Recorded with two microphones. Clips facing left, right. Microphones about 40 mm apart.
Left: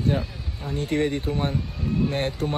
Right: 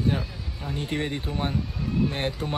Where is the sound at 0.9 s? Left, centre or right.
Centre.